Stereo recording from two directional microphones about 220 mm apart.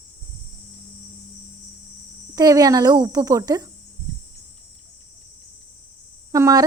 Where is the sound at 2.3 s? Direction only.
15° right (ahead or behind).